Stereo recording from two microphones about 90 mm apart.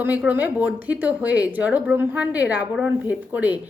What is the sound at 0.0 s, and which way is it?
A woman's voice, 20° right (ahead or behind).